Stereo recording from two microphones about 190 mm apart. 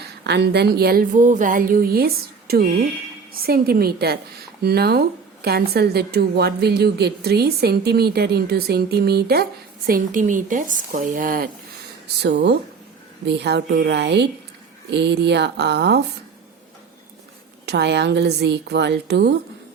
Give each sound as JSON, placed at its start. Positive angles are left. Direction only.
{"t": 0.3, "sound": "a woman's voice", "side_deg": -60}
{"t": 12.2, "sound": "a woman's voice", "side_deg": -60}
{"t": 17.7, "sound": "a woman's voice", "side_deg": -60}